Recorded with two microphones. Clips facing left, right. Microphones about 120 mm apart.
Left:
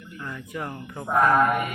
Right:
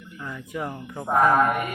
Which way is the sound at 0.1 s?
5° right (ahead or behind).